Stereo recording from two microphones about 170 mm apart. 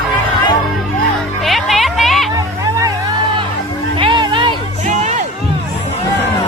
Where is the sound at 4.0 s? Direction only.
30° right (ahead or behind).